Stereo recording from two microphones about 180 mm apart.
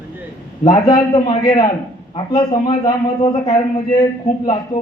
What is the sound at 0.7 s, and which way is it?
A man's voice, 25° left (ahead or behind).